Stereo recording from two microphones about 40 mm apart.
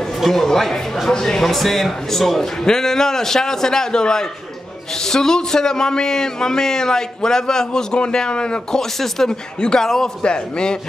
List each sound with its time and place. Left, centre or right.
0.2 s speech: centre
1.4 s speech: centre; by 8.8 s left
9.0 s speech: centre
9.6 s a man's voice: left
9.8 s speech: centre
10.2 s a man's voice: left